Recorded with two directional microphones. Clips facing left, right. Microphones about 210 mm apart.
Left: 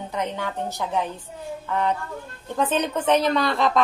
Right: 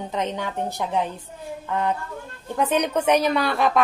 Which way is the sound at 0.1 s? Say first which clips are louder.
Right 1 dB; 20° right (ahead or behind).